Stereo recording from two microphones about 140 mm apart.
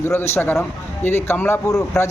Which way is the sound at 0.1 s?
15° left (ahead or behind).